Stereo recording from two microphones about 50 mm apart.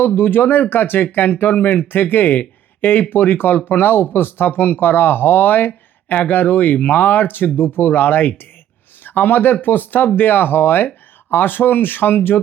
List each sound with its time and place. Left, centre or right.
0.2 s speech: left